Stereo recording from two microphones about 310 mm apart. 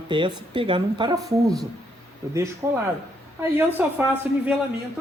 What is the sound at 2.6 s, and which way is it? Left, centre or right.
A man's voice, centre.